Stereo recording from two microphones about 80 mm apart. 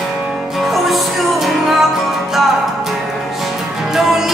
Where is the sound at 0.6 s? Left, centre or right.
Centre.